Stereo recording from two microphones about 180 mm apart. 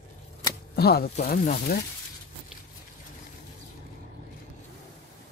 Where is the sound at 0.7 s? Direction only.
60° left (ahead or behind).